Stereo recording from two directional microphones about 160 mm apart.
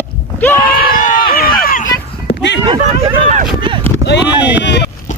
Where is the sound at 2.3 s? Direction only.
90° left.